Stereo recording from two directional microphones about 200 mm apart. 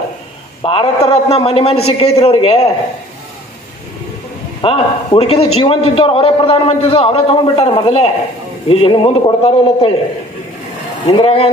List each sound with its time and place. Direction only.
0.6 s a man's voice: 25° left (ahead or behind)
4.6 s a man's voice: 25° left (ahead or behind)
11.1 s a man's voice: 30° left (ahead or behind)